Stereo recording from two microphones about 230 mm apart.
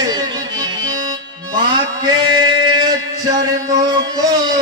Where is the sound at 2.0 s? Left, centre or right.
Centre.